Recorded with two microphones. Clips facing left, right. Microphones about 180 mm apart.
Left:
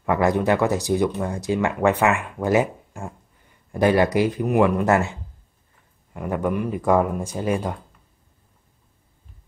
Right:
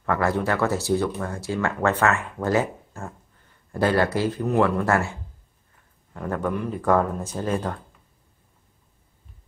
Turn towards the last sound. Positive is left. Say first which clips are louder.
# left 2 dB
turn(degrees=10)  # may be behind; listen again after turning